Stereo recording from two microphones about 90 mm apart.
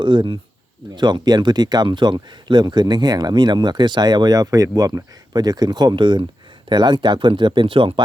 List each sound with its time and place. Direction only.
0.0 s speech: 60° right (ahead or behind)